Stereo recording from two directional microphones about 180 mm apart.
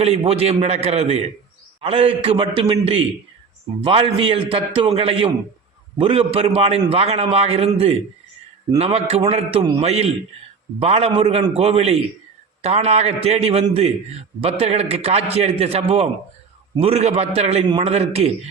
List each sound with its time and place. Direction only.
0.0 s a man's voice: 35° right (ahead or behind)